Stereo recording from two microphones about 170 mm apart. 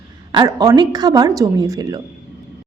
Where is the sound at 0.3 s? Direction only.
25° right (ahead or behind).